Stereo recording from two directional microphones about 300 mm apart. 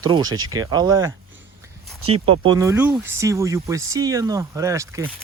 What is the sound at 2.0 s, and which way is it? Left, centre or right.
Speech, right.